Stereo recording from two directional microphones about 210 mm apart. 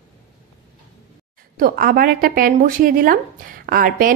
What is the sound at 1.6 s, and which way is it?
Speech, 45° right (ahead or behind).